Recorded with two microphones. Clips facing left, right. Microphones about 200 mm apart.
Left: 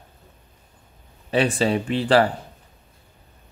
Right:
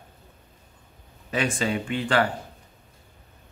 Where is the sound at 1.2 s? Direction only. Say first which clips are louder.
Left 6 dB; 35° left (ahead or behind).